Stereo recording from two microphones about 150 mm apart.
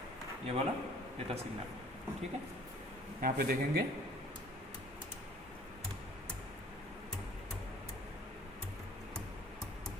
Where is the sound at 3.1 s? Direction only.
75° right (ahead or behind).